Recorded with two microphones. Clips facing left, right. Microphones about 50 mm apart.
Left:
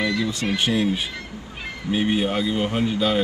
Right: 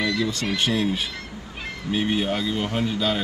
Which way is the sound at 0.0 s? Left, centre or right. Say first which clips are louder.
Left 1 dB; centre.